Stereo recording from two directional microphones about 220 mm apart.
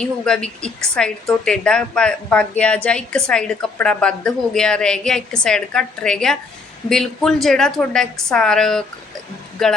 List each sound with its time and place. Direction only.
0.0 s a woman's voice: 5° left (ahead or behind)